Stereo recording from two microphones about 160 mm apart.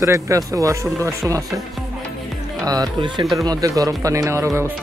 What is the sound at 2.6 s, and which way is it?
Speech, 25° right (ahead or behind).